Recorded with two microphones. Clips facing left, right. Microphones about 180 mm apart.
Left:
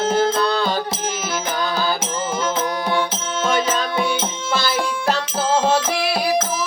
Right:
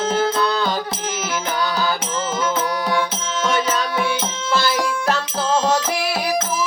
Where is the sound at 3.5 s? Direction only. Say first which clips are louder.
Left 1 dB; 25° left (ahead or behind).